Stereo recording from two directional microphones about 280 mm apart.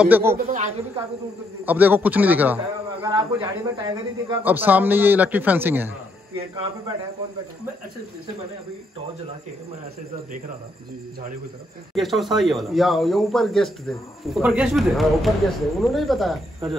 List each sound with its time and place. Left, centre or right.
0.0 s a man's voice: centre
0.5 s speech: right
1.7 s a man's voice: centre
11.9 s speech: centre